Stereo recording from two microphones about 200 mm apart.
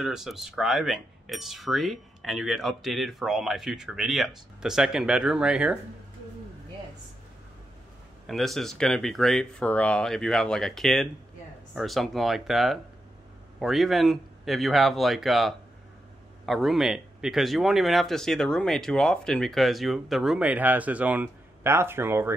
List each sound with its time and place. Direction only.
0.0 s speech: centre (ahead or behind)
8.3 s speech: centre (ahead or behind)